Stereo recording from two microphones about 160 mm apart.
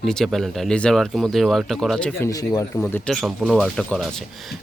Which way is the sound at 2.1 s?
20° left (ahead or behind).